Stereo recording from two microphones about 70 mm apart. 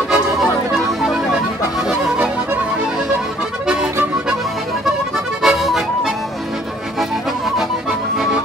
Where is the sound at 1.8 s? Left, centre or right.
Centre.